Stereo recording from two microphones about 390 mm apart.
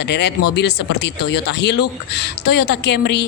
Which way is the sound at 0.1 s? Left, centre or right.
Left.